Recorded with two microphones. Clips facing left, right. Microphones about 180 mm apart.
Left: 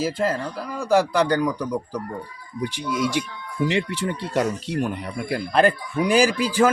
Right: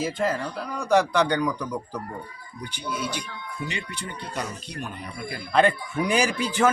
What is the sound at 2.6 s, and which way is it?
Speech, 90° left.